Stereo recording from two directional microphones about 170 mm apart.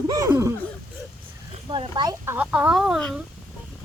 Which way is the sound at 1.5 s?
30° right (ahead or behind).